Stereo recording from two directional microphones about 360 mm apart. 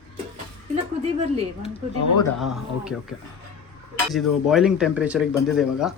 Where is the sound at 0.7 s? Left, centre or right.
Centre.